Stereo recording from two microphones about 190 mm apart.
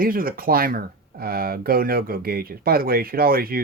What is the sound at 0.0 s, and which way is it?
Speech, 50° right (ahead or behind).